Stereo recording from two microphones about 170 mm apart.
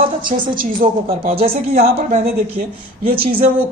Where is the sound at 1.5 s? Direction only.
65° right (ahead or behind).